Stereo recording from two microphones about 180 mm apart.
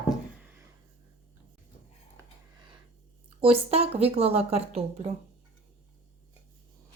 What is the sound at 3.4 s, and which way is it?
A woman's voice, 35° right (ahead or behind).